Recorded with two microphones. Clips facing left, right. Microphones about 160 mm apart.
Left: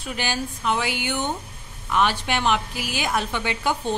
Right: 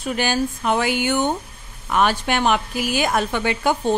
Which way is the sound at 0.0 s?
50° right (ahead or behind).